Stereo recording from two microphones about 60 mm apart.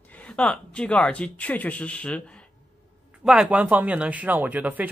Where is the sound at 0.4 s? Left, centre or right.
Left.